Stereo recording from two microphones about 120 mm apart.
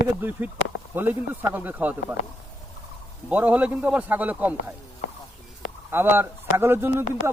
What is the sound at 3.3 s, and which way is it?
Speech, 10° right (ahead or behind).